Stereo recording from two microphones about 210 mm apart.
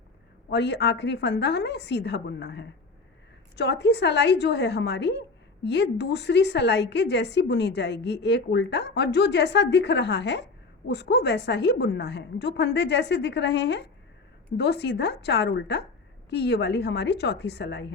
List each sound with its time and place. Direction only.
0.5 s a woman's voice: 55° left (ahead or behind)